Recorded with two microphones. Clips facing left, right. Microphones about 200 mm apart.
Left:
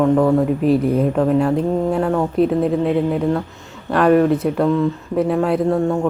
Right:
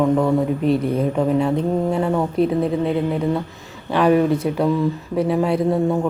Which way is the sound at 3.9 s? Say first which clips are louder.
Left 2 dB; centre (ahead or behind).